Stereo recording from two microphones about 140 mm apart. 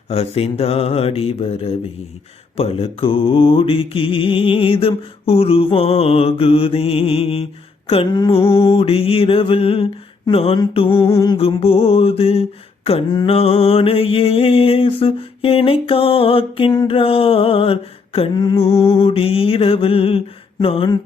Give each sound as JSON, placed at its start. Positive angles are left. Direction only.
{"t": 0.1, "sound": "mantra", "side_deg": 45}
{"t": 8.4, "sound": "mantra", "side_deg": 40}
{"t": 10.8, "sound": "a sound", "side_deg": 40}
{"t": 11.3, "sound": "mantra", "side_deg": 45}